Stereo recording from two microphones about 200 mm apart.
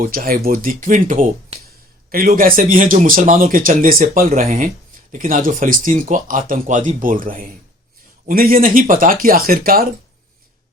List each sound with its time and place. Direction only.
0.0 s speech: 45° right (ahead or behind)